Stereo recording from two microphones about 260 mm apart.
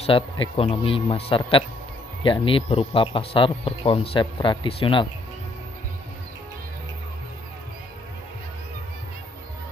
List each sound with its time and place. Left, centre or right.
0.0 s speech: left